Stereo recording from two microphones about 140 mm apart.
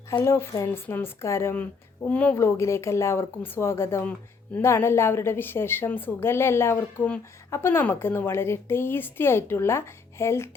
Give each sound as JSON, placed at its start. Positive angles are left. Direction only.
{"t": 0.1, "sound": "a woman's voice", "side_deg": 20}